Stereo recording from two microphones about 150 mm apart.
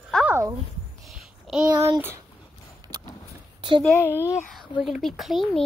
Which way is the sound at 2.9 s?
15° left (ahead or behind).